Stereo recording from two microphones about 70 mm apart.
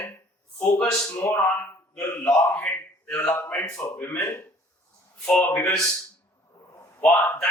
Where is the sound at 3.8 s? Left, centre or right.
Left.